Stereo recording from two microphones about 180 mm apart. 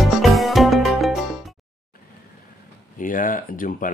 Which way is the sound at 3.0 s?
50° left (ahead or behind).